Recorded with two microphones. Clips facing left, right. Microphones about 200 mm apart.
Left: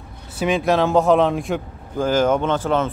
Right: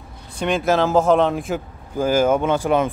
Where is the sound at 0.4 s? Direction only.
Centre (ahead or behind).